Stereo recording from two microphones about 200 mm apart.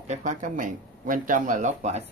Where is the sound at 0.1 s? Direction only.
40° right (ahead or behind).